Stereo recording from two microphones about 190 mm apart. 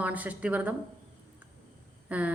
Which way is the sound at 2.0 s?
5° right (ahead or behind).